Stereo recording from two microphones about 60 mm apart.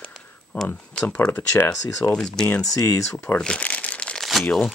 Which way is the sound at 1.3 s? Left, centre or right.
Left.